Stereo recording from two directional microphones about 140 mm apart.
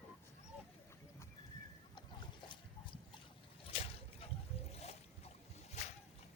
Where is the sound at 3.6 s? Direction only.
45° left (ahead or behind).